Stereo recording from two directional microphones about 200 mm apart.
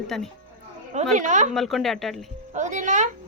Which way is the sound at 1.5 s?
Centre (ahead or behind).